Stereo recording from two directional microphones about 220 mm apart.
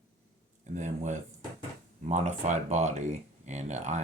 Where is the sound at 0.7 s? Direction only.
35° right (ahead or behind).